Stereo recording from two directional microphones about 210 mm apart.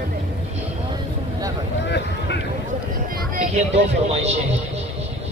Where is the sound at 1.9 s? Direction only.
55° left (ahead or behind).